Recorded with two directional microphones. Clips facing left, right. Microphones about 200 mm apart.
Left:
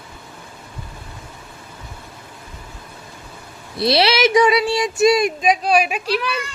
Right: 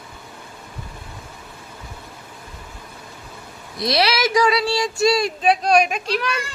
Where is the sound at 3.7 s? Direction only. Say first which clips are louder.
Left 4 dB; 30° left (ahead or behind); by 6.4 s centre (ahead or behind).